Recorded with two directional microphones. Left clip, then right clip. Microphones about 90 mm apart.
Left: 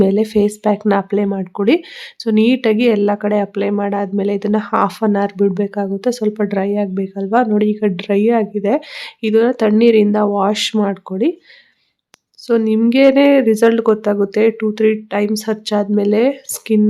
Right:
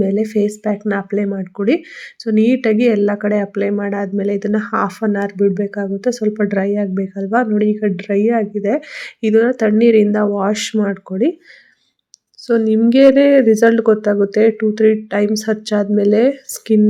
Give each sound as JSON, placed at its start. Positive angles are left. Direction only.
{"t": 0.0, "sound": "speech", "side_deg": 35}
{"t": 9.0, "sound": "speech", "side_deg": 10}
{"t": 12.5, "sound": "speech", "side_deg": 5}